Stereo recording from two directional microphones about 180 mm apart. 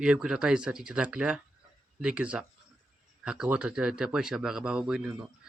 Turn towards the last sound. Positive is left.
turn(degrees=-5)  # may be behind; listen again after turning